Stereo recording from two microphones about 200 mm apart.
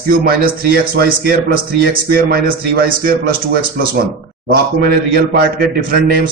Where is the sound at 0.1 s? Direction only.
45° right (ahead or behind).